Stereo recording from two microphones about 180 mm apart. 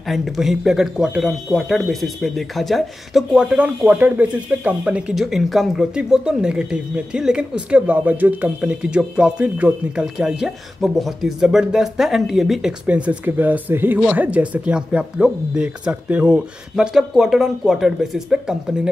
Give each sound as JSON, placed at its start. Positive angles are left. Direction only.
{"t": 0.0, "sound": "speech", "side_deg": 0}